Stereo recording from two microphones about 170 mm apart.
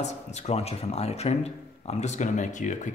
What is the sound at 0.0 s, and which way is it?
Speech, 40° left (ahead or behind).